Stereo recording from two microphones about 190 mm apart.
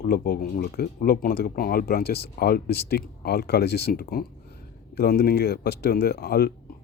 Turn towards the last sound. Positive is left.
turn(degrees=55)  # may be behind; listen again after turning